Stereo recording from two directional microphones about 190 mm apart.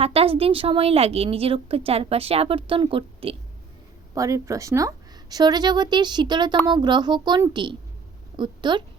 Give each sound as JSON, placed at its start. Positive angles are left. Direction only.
{"t": 0.0, "sound": "a woman's voice", "side_deg": -30}
{"t": 4.1, "sound": "a woman's voice", "side_deg": -15}